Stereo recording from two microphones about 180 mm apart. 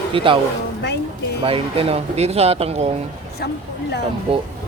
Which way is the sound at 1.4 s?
30° right (ahead or behind).